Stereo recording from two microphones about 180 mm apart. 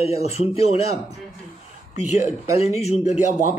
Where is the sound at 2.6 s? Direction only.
35° left (ahead or behind).